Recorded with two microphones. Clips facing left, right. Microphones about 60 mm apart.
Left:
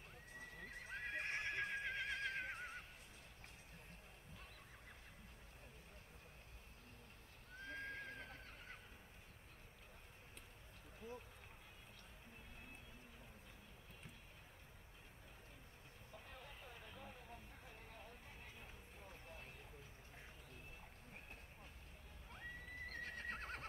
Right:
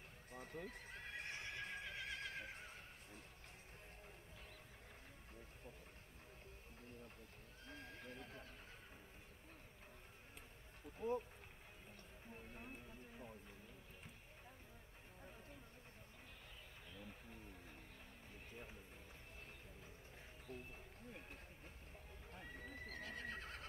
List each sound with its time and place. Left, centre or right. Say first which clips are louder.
0.3 s horse: right 4 dB; right
0.7 s neigh: left 4 dB; left
7.5 s neigh: left 8 dB; left
11.0 s a sound: right 11 dB; right
16.4 s a sound: left 3 dB; left
22.8 s horse: left 1 dB; left